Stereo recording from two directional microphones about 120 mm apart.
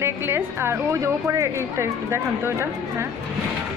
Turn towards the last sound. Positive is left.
turn(degrees=-20)  # may be behind; listen again after turning